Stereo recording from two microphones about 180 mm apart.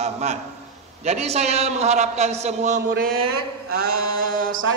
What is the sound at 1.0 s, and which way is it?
A man's voice, 35° right (ahead or behind).